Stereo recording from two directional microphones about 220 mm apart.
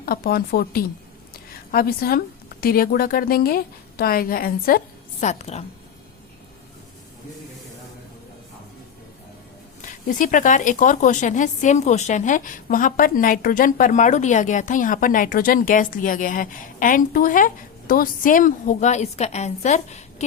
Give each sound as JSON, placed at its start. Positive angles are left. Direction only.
{"t": 0.0, "sound": "a woman's voice", "side_deg": 45}
{"t": 5.2, "sound": "a woman's voice", "side_deg": 30}
{"t": 9.8, "sound": "a woman's voice", "side_deg": 35}